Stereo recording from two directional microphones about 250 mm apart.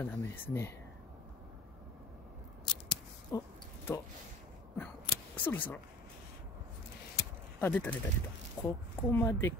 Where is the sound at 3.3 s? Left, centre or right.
Centre.